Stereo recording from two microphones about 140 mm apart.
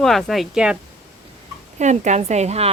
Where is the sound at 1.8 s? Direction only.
55° right (ahead or behind).